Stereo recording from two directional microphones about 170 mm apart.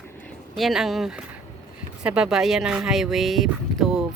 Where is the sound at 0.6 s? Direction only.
Centre (ahead or behind).